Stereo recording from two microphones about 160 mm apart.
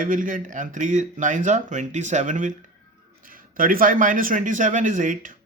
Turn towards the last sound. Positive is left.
turn(degrees=-55)  # may be behind; listen again after turning